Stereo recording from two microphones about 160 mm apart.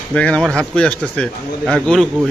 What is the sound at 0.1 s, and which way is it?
A man's voice, 5° left (ahead or behind).